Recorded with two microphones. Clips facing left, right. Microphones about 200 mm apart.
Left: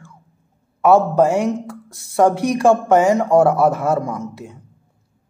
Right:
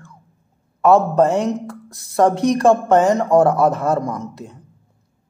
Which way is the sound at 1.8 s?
25° left (ahead or behind).